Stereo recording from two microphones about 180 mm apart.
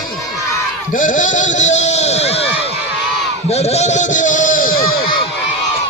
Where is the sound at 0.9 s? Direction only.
45° left (ahead or behind).